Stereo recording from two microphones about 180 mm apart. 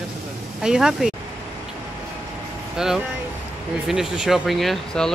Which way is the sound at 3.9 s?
Centre (ahead or behind).